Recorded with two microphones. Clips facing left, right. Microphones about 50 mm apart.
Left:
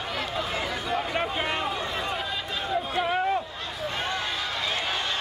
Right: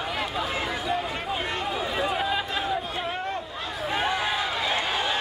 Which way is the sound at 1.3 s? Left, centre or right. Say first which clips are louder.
Left 1 dB; centre.